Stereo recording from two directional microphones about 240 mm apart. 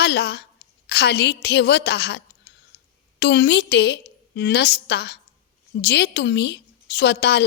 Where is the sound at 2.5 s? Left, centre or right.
Left.